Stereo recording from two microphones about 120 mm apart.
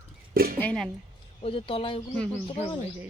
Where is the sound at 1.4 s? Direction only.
50° left (ahead or behind).